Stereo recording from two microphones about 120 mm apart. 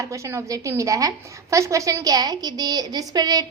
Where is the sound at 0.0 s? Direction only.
25° right (ahead or behind).